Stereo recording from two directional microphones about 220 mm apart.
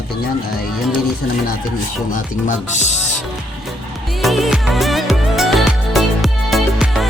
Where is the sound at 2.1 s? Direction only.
35° left (ahead or behind).